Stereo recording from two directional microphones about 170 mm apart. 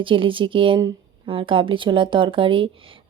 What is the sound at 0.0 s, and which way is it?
A woman's voice, 30° right (ahead or behind).